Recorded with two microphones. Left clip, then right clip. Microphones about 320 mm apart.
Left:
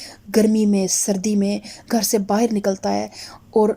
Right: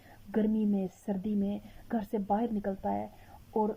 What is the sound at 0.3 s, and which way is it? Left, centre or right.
Speech, left.